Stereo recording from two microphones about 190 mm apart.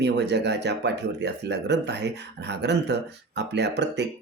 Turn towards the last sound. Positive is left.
turn(degrees=-65)  # may be behind; listen again after turning